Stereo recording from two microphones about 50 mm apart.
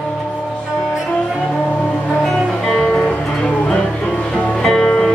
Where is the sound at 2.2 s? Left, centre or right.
Centre.